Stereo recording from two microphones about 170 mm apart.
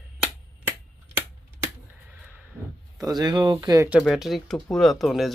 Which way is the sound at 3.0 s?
25° right (ahead or behind).